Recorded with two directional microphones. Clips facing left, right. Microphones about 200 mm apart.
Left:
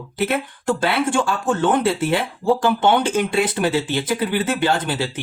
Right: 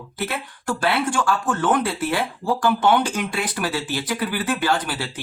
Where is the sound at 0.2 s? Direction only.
20° left (ahead or behind).